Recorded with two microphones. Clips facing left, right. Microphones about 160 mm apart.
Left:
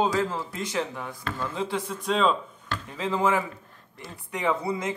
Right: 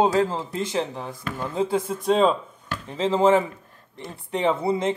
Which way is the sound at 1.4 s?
40° right (ahead or behind).